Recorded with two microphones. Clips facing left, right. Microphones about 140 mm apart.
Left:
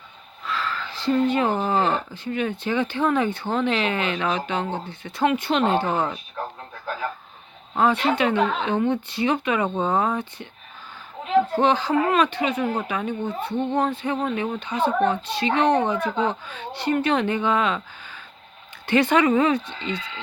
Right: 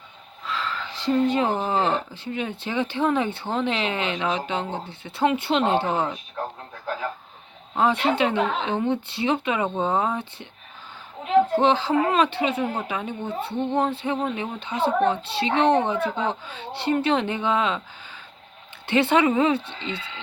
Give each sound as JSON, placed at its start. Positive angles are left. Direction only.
{"t": 0.4, "sound": "speech", "side_deg": -25}
{"t": 7.8, "sound": "speech", "side_deg": -30}
{"t": 11.6, "sound": "speech", "side_deg": -25}